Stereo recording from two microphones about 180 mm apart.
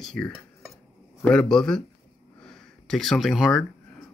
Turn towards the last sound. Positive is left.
turn(degrees=0)  # may be behind; listen again after turning